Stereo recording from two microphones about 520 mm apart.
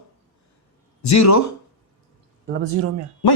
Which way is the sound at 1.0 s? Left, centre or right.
Left.